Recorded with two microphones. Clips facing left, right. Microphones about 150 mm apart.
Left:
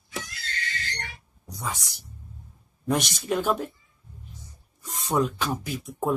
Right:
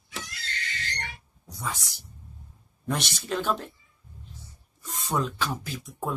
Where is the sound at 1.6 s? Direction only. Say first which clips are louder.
Left 1 dB; 15° left (ahead or behind).